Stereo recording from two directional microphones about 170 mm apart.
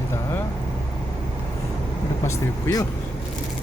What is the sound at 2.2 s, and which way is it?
Speech, 20° left (ahead or behind).